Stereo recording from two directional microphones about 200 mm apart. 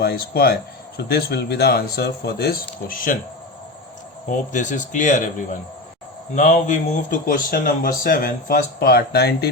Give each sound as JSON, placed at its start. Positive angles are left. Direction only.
{"t": 0.0, "sound": "speech", "side_deg": 50}
{"t": 4.3, "sound": "speech", "side_deg": 40}
{"t": 6.3, "sound": "speech", "side_deg": 40}